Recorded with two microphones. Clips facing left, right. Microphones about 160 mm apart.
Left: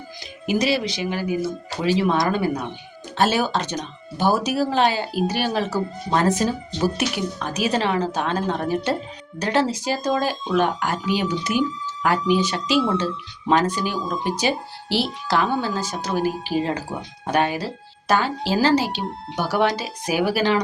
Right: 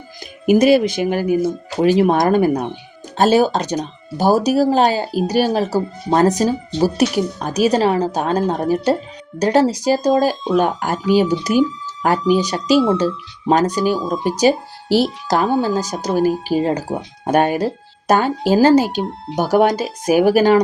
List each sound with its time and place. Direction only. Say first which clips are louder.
0.4 s speech: right 9 dB; 50° right (ahead or behind)